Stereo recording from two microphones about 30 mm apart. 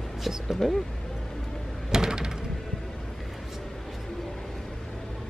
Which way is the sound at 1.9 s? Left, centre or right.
Right.